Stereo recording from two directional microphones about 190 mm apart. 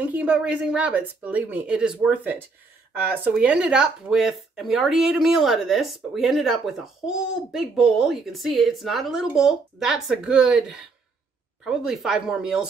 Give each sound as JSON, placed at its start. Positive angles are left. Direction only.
{"t": 0.0, "sound": "speech", "side_deg": -5}